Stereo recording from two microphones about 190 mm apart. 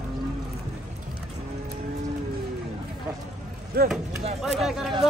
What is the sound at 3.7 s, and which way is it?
Chop, 50° right (ahead or behind).